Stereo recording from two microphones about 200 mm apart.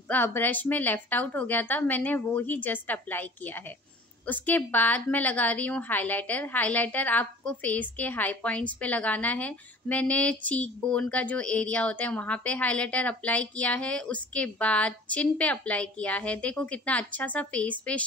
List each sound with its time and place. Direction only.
0.1 s a woman's voice: 10° left (ahead or behind)